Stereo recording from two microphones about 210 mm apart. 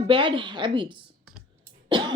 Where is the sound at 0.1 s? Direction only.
25° right (ahead or behind).